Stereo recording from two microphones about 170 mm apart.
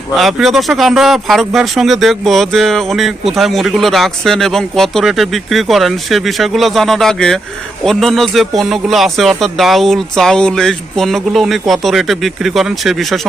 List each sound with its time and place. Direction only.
0.2 s speech: centre (ahead or behind)